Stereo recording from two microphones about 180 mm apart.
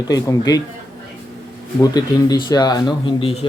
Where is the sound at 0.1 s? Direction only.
20° left (ahead or behind).